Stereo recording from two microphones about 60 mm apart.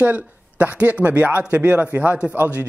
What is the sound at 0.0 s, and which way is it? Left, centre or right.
A man's voice, right.